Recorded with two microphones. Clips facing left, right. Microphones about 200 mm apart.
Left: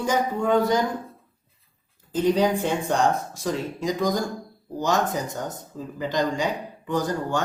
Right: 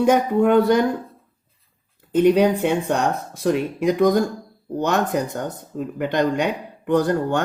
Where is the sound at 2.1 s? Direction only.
60° right (ahead or behind).